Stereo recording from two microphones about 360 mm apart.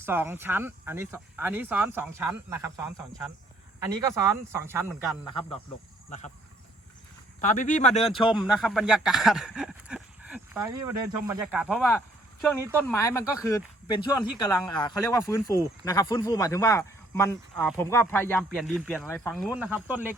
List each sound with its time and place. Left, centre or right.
0.0 s speech: centre
5.2 s speech: centre
7.4 s speech: left
8.4 s speech: centre